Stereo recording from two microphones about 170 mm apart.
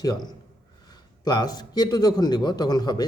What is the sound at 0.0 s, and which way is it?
A man's voice, 20° left (ahead or behind).